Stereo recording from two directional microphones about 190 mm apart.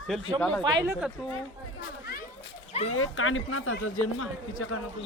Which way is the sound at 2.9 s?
90° left.